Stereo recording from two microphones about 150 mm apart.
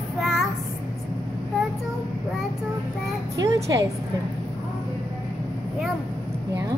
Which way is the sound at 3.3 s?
20° right (ahead or behind).